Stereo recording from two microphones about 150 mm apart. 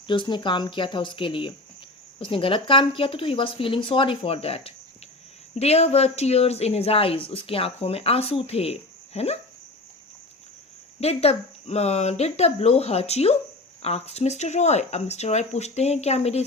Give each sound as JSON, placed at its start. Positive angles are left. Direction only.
{"t": 0.1, "sound": "speech", "side_deg": 30}
{"t": 11.0, "sound": "speech", "side_deg": 45}